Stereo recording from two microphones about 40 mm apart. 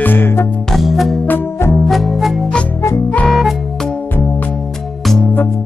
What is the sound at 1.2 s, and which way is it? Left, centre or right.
Music, left.